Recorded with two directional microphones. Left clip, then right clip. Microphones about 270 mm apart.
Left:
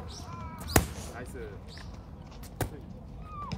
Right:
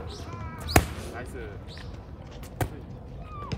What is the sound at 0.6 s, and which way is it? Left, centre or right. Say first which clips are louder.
Basketball bounce: right 4 dB; centre.